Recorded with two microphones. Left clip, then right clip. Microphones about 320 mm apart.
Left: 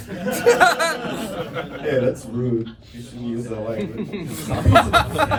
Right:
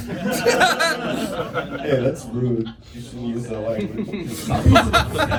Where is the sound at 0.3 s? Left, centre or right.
Centre.